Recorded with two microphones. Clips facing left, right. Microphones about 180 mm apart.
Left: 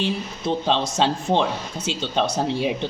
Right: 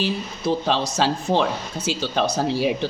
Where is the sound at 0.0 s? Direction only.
25° left (ahead or behind).